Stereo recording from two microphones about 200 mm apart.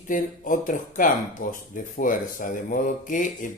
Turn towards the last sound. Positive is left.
turn(degrees=40)  # may be behind; listen again after turning